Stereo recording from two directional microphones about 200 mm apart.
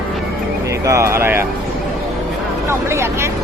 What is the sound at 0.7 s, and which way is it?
Speech, 15° right (ahead or behind).